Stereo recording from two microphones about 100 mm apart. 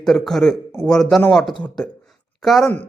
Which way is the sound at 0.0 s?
5° left (ahead or behind).